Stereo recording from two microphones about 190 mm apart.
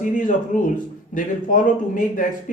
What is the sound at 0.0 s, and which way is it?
Speech, 45° left (ahead or behind).